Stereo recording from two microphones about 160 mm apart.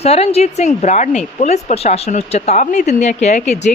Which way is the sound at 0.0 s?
40° left (ahead or behind).